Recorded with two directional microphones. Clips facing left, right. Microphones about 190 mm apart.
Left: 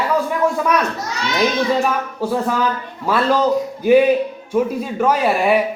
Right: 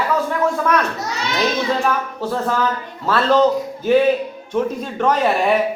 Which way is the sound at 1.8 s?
10° left (ahead or behind).